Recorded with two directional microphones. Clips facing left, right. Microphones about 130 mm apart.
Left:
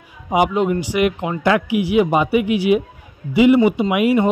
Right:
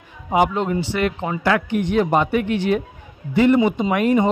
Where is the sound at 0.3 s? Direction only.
15° left (ahead or behind).